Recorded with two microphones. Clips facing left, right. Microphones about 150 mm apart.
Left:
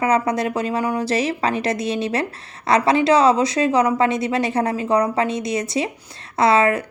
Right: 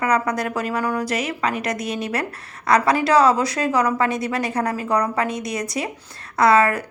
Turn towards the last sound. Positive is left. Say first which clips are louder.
# even
turn(degrees=25)  # may be behind; listen again after turning